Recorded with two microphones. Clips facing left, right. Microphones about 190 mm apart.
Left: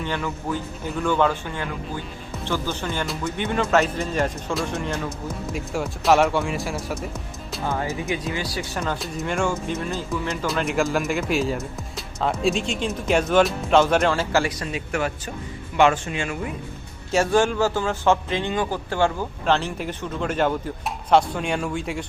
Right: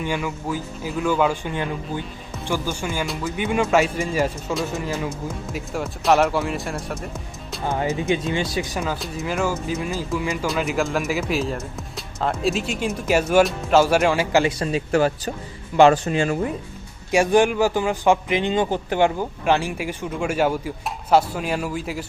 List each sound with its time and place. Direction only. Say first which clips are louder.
0.0 s a man's voice: right 2 dB; 10° right (ahead or behind)
2.4 s a man's voice: right 1 dB; 10° right (ahead or behind)
7.7 s speech: right 5 dB; 20° right (ahead or behind)
8.8 s speech: right 1 dB; 5° right (ahead or behind)
14.6 s speech: right 6 dB; 30° right (ahead or behind)
17.1 s a man's voice: right 3 dB; 15° right (ahead or behind)